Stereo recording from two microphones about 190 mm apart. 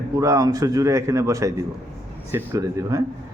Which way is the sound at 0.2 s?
20° right (ahead or behind).